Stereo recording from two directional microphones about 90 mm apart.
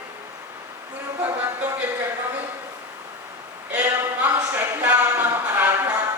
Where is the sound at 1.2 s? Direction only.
20° right (ahead or behind).